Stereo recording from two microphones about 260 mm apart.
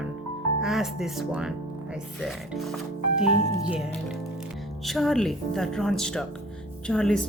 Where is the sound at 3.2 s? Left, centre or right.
Left.